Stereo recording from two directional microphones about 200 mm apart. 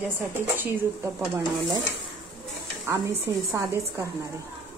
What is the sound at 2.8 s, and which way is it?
Speech, 15° right (ahead or behind).